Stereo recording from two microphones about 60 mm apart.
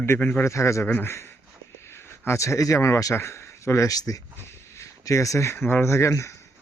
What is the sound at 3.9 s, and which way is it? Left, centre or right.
Speech, left.